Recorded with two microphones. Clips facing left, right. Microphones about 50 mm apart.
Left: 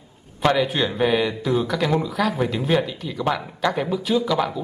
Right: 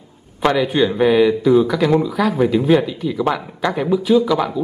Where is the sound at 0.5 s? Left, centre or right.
Centre.